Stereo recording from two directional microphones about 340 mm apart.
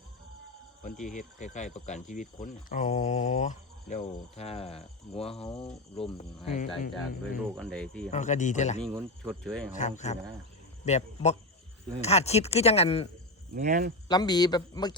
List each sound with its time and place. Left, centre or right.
1.0 s speech: left
7.3 s speech: centre
8.1 s speech: left
9.2 s speech: centre
10.1 s speech: centre
13.5 s speech: right
14.1 s speech: centre